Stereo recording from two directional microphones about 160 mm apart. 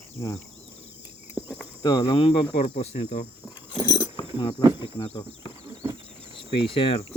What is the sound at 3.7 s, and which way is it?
Dog, 25° left (ahead or behind).